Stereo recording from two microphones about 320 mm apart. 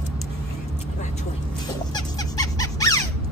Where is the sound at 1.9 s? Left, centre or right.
Centre.